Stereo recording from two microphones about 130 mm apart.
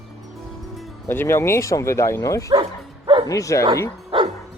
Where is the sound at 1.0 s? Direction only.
15° left (ahead or behind).